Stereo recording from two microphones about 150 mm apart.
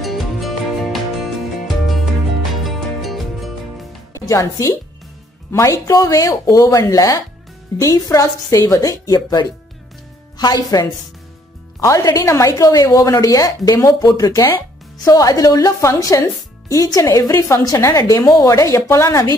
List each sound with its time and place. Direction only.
0.0 s music: centre (ahead or behind)
2.6 s music: centre (ahead or behind)
4.1 s a woman's voice: 20° left (ahead or behind)